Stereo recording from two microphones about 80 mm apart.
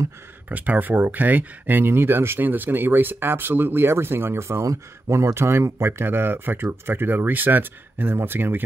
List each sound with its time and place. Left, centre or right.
0.5 s speech: centre